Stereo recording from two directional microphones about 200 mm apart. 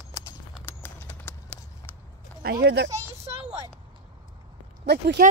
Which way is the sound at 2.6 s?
60° right (ahead or behind).